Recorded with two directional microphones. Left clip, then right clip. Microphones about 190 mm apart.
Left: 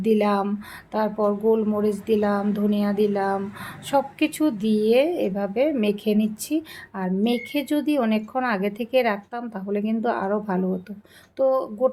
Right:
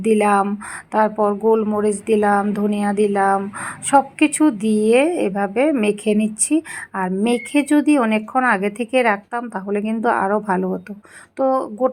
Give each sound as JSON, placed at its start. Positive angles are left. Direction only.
{"t": 0.0, "sound": "speech", "side_deg": -20}